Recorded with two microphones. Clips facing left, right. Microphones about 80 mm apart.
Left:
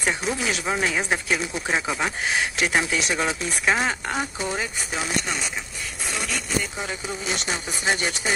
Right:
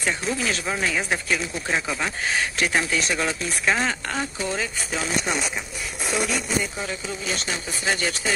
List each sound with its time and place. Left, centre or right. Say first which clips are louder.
0.0 s speech: even; centre
6.0 s speech: right 5 dB; centre
6.8 s speech: even; left